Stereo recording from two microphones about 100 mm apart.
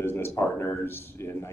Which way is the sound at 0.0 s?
25° left (ahead or behind).